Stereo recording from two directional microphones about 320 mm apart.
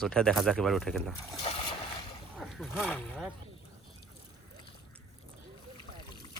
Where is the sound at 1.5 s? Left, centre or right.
Centre.